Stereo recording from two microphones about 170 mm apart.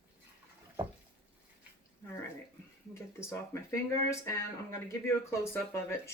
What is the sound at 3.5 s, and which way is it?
Speech, 15° left (ahead or behind).